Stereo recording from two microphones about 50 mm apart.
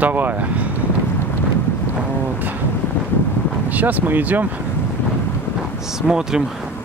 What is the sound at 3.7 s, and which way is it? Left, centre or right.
Speech, right.